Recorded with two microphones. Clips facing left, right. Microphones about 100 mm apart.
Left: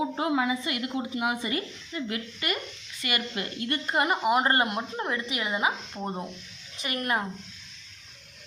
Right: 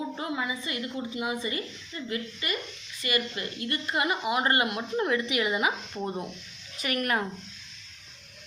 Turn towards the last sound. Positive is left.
turn(degrees=25)  # may be behind; listen again after turning